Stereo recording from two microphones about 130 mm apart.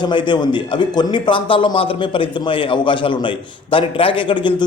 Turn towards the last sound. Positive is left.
turn(degrees=40)  # may be behind; listen again after turning